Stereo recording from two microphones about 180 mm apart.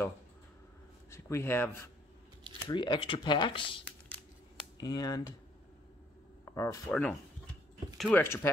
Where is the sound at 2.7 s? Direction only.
25° left (ahead or behind).